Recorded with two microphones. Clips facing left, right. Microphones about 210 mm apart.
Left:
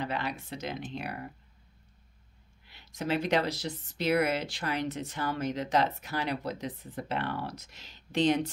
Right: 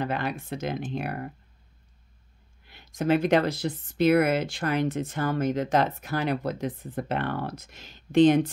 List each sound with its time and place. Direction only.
0.0 s speech: 50° right (ahead or behind)
2.6 s speech: 50° right (ahead or behind)